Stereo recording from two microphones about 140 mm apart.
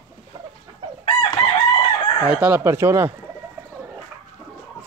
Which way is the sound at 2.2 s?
10° right (ahead or behind).